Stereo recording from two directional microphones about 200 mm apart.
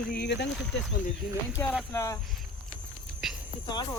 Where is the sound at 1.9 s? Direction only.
15° left (ahead or behind).